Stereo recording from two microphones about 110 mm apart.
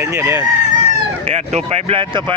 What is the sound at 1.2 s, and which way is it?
Speech, 90° right.